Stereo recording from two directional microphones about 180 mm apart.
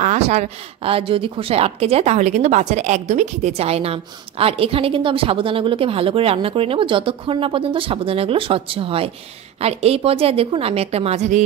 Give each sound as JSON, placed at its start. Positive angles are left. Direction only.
{"t": 0.0, "sound": "speech", "side_deg": -40}